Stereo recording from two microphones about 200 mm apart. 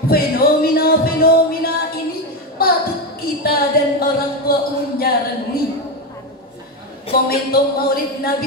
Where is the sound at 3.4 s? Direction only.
50° left (ahead or behind).